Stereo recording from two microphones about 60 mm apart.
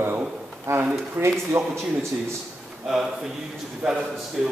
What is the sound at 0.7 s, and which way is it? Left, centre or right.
Speech, right.